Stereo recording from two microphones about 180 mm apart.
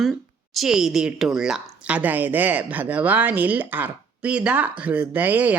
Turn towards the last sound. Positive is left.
turn(degrees=-10)  # may be behind; listen again after turning